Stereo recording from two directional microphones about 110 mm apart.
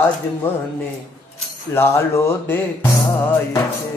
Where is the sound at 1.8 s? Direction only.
25° left (ahead or behind).